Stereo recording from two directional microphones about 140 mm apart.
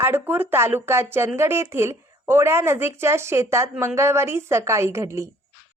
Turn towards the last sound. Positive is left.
turn(degrees=-20)  # may be behind; listen again after turning